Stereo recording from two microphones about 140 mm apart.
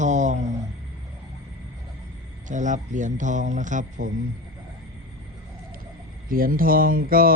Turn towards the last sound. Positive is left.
turn(degrees=-90)